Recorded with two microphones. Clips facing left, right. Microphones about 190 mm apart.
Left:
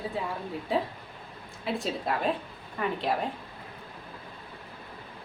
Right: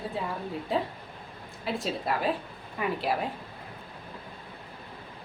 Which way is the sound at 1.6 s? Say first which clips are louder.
Even; centre (ahead or behind).